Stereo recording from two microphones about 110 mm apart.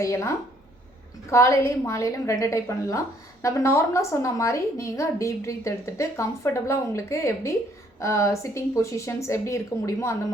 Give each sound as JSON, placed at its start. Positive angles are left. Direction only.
{"t": 0.0, "sound": "a woman's voice", "side_deg": 25}